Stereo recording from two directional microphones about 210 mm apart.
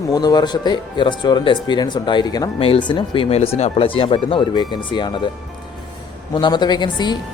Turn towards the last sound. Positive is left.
turn(degrees=20)  # may be behind; listen again after turning